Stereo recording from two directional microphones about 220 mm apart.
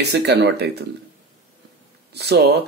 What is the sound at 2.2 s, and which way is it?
Speech, 50° right (ahead or behind).